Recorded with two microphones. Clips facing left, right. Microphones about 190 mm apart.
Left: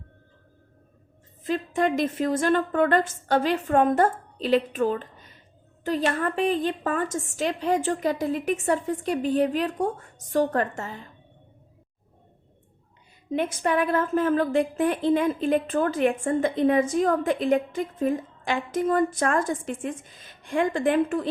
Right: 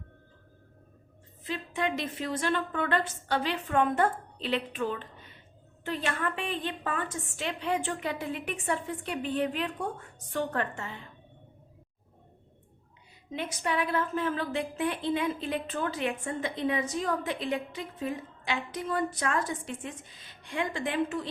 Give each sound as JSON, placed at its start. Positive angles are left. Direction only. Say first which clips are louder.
{"t": 1.5, "sound": "a woman's voice", "louder": "left 8 dB", "side_deg": 45}
{"t": 13.3, "sound": "a woman's voice", "louder": "left 7 dB", "side_deg": 50}